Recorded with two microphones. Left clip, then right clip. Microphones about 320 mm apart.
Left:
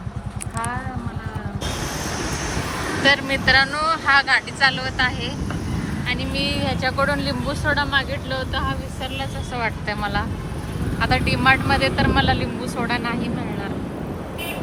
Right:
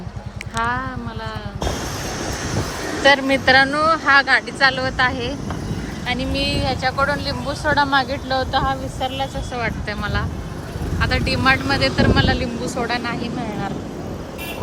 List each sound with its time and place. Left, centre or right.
3.0 s speech: centre
9.0 s speech: centre